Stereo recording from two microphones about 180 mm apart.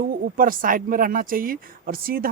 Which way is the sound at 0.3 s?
50° right (ahead or behind).